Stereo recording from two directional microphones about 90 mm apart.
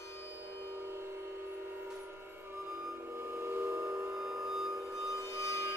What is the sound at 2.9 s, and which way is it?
Train, 25° right (ahead or behind).